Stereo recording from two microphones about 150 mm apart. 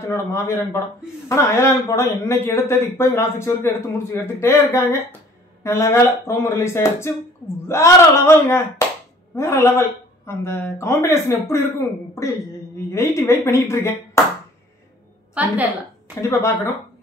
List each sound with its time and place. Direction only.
0.0 s a man's voice: 15° left (ahead or behind)
13.3 s a man's voice: 15° left (ahead or behind)
15.3 s a woman's voice: 10° right (ahead or behind)
16.2 s a man's voice: 20° left (ahead or behind)